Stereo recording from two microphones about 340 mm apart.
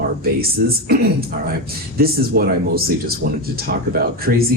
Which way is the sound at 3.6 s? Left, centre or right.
Right.